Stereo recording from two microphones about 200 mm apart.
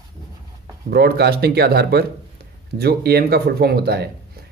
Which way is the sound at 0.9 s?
55° right (ahead or behind).